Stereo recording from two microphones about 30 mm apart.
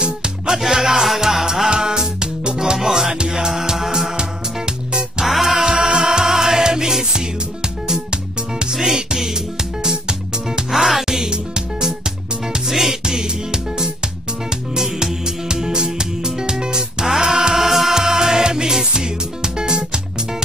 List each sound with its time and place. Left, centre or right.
0.7 s music: centre
1.2 s music: centre
5.2 s music: centre
5.7 s music: right
10.7 s music: centre
11.1 s music: right
13.0 s music: right
17.9 s music: centre